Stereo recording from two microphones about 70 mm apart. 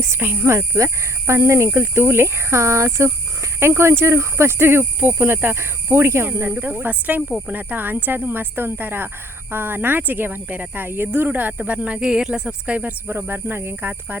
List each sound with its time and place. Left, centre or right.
0.2 s speech: right